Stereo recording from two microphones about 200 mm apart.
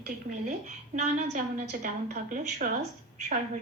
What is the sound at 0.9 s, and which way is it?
A woman's voice, 35° right (ahead or behind).